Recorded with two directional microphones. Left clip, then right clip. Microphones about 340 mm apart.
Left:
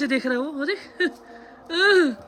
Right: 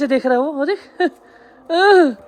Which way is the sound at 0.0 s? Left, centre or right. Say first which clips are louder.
Right 8 dB; centre.